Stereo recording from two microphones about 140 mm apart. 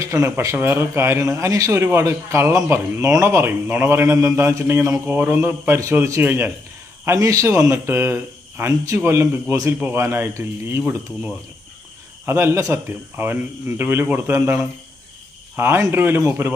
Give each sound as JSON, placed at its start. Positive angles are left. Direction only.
{"t": 0.0, "sound": "speech", "side_deg": -20}